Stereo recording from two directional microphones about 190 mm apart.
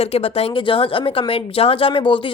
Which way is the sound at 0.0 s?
30° left (ahead or behind).